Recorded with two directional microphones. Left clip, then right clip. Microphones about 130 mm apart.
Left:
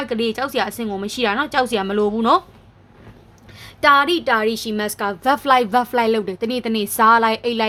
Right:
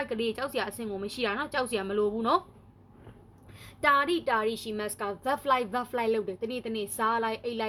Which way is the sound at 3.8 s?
25° left (ahead or behind).